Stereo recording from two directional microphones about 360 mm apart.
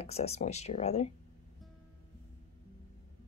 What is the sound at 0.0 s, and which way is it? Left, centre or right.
Speech, centre.